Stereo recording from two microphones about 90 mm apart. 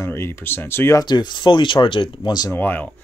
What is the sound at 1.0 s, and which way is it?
Speech, 55° left (ahead or behind).